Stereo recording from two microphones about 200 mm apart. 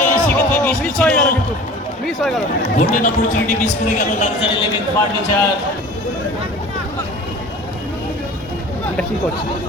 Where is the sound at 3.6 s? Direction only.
40° left (ahead or behind).